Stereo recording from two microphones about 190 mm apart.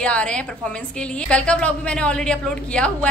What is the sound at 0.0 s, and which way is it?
A woman's voice, 5° left (ahead or behind).